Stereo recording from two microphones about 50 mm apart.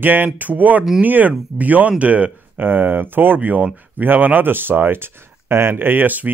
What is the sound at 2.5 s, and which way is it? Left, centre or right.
Speech, right.